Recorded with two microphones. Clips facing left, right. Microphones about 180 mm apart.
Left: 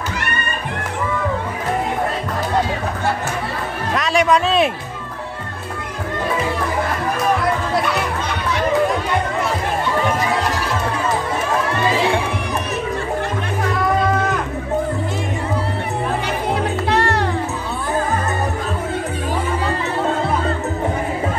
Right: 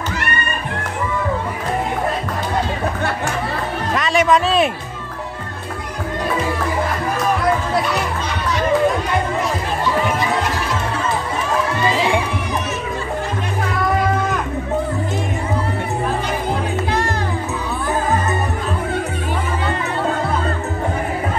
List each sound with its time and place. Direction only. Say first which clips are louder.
3.9 s speech: even; centre (ahead or behind)
16.9 s music: left 5 dB; 70° left (ahead or behind)